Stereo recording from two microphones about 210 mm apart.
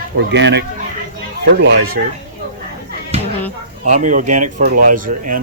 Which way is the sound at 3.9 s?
35° right (ahead or behind).